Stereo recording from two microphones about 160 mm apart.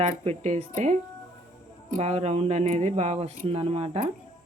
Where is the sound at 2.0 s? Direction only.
45° right (ahead or behind).